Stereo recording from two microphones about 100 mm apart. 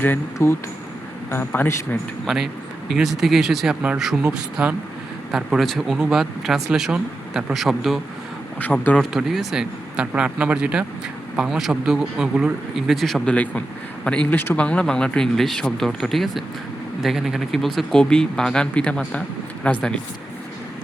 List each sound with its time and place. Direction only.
0.0 s a man's voice: 25° left (ahead or behind)
2.2 s speech: 5° right (ahead or behind)
8.5 s speech: 15° left (ahead or behind)
9.0 s speech: 5° right (ahead or behind)
13.3 s speech: 15° left (ahead or behind)